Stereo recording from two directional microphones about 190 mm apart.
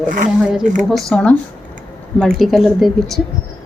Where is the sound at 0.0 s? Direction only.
45° right (ahead or behind).